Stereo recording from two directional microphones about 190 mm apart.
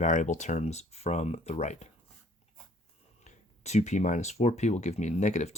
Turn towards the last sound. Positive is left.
turn(degrees=40)  # may be behind; listen again after turning